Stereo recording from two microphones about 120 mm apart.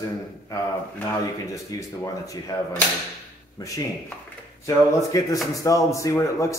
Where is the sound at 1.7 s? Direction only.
30° left (ahead or behind).